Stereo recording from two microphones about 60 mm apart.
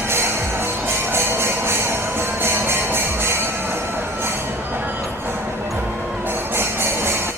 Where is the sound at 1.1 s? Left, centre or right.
Right.